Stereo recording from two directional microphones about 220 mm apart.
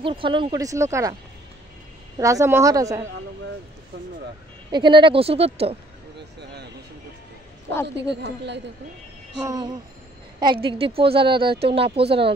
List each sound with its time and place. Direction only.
0.0 s speech: 25° right (ahead or behind)
2.1 s speech: 15° right (ahead or behind)
4.6 s speech: 20° right (ahead or behind)
6.1 s a sound: 50° right (ahead or behind)
8.1 s speech: 50° right (ahead or behind)
9.4 s speech: 20° right (ahead or behind)